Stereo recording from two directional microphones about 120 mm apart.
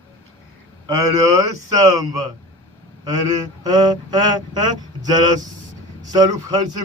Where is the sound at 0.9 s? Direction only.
30° right (ahead or behind).